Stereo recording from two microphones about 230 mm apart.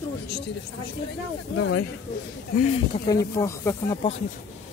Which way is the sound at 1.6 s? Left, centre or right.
Left.